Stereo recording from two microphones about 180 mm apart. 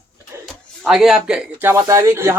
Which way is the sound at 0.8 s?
Centre (ahead or behind).